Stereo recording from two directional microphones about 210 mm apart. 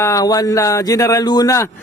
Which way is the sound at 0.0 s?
15° left (ahead or behind).